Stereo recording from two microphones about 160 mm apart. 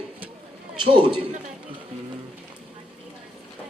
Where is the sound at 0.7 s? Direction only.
30° right (ahead or behind).